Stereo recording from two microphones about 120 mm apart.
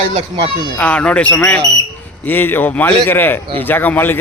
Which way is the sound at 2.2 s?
15° left (ahead or behind).